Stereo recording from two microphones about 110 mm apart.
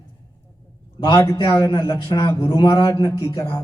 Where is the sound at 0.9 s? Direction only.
40° left (ahead or behind).